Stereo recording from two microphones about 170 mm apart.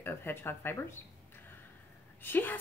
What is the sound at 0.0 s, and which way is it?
Speech, 15° left (ahead or behind).